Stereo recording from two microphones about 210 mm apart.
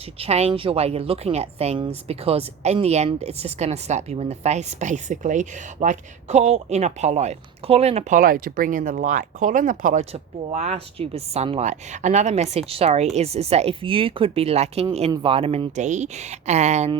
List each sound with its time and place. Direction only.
0.2 s a woman's voice: 30° right (ahead or behind)